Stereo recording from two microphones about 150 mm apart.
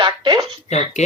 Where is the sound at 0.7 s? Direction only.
50° left (ahead or behind).